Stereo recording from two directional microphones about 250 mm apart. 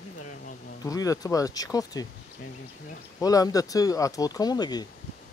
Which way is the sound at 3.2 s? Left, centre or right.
Centre.